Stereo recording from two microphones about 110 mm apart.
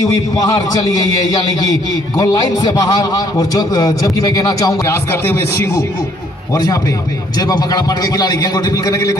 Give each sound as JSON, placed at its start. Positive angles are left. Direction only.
{"t": 0.4, "sound": "a man's voice", "side_deg": 35}
{"t": 6.5, "sound": "a man's voice", "side_deg": 35}